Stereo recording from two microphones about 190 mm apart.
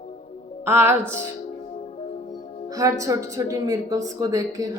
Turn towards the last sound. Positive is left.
turn(degrees=-20)  # may be behind; listen again after turning